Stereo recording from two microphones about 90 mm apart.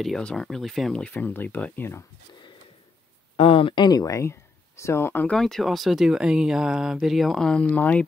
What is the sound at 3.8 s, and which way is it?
Speech, 45° left (ahead or behind).